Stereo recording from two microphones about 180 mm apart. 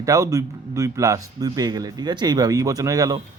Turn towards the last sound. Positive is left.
turn(degrees=-20)  # may be behind; listen again after turning